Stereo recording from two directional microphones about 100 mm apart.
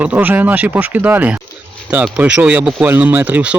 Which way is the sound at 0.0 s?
15° right (ahead or behind).